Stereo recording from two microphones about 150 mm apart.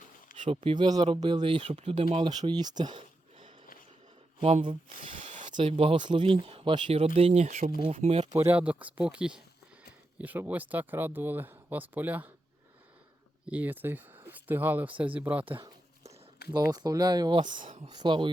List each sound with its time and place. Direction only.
0.4 s speech: 35° right (ahead or behind)
5.2 s a sound: 50° right (ahead or behind)
5.5 s speech: 35° right (ahead or behind)
8.3 s speech: 15° right (ahead or behind)
13.5 s speech: 10° right (ahead or behind)
16.6 s speech: 25° right (ahead or behind)